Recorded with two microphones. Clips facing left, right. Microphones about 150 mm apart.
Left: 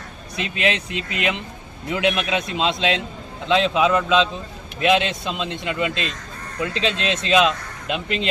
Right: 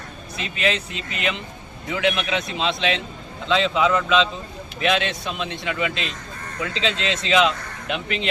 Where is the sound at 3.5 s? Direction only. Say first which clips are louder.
Left 2 dB; 15° left (ahead or behind).